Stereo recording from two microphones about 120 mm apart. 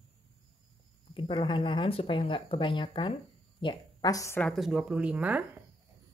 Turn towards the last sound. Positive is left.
turn(degrees=-10)  # may be behind; listen again after turning